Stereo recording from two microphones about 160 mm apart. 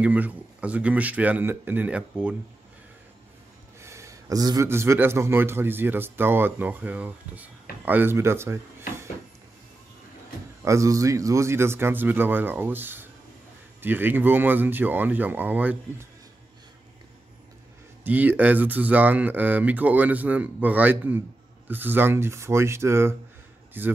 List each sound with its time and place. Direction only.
0.0 s a man's voice: 10° right (ahead or behind)
3.8 s a man's voice: 20° right (ahead or behind)
10.6 s a man's voice: 20° right (ahead or behind)
18.0 s a man's voice: 10° right (ahead or behind)